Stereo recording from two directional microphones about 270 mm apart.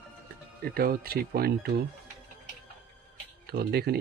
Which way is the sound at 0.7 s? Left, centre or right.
Right.